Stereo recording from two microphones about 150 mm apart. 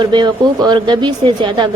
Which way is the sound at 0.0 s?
30° right (ahead or behind).